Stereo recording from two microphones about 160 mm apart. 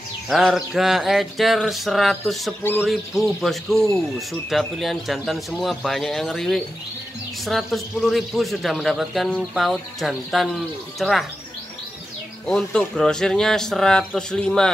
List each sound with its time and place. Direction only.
0.3 s a man's voice: centre (ahead or behind)
12.4 s a man's voice: 5° left (ahead or behind)